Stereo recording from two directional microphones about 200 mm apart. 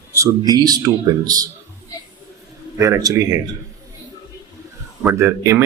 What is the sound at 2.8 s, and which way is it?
Speech, 15° right (ahead or behind).